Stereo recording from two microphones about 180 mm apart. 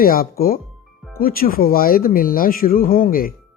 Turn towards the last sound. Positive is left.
turn(degrees=50)  # may be behind; listen again after turning